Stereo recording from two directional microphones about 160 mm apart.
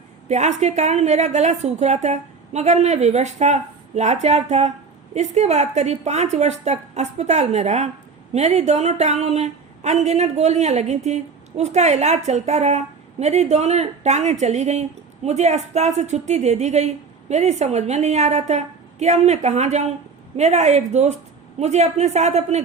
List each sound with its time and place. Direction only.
0.3 s a woman's voice: 45° right (ahead or behind)